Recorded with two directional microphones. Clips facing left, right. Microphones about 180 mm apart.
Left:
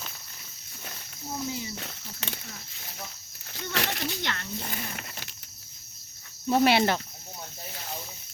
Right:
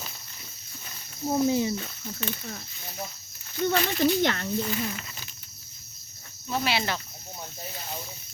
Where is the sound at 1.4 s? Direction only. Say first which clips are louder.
Right 11 dB; 60° right (ahead or behind).